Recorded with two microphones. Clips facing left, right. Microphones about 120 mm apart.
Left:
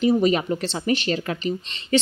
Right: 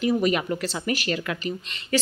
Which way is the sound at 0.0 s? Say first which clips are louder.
Left 3 dB; 30° left (ahead or behind).